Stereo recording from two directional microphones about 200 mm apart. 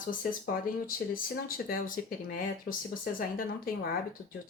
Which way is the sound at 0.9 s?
45° left (ahead or behind).